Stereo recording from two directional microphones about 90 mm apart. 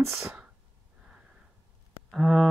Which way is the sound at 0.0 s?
5° right (ahead or behind).